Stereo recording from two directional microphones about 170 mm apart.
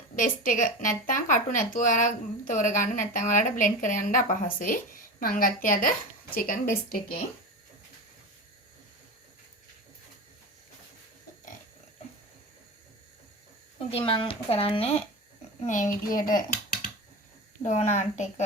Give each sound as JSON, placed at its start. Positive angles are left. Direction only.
{"t": 0.2, "sound": "speech", "side_deg": 50}
{"t": 13.7, "sound": "speech", "side_deg": 35}
{"t": 17.6, "sound": "speech", "side_deg": 40}